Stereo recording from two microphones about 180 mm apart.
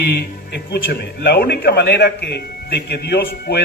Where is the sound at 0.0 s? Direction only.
65° left (ahead or behind).